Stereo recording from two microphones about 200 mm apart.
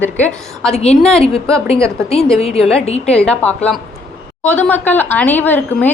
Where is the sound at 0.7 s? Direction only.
30° left (ahead or behind).